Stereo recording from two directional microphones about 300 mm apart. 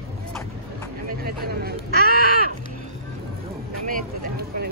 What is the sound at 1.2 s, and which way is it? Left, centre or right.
Speech, right.